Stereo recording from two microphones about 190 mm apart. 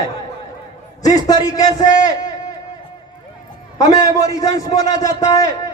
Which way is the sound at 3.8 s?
20° left (ahead or behind).